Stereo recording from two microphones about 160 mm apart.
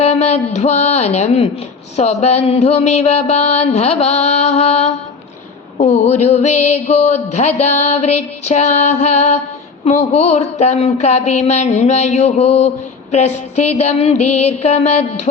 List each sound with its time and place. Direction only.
0.0 s speech: 40° left (ahead or behind)
2.0 s mantra: 45° left (ahead or behind)
5.7 s speech: 45° left (ahead or behind)